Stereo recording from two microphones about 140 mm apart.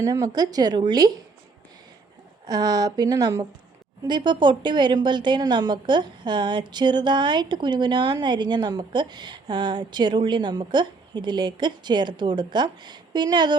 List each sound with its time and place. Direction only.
0.0 s speech: 25° right (ahead or behind)
2.5 s a woman's voice: 30° right (ahead or behind)